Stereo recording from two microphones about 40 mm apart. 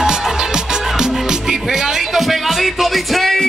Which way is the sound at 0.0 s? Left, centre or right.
Centre.